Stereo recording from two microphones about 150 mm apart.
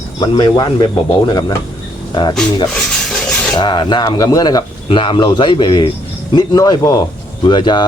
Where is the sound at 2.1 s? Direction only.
30° left (ahead or behind).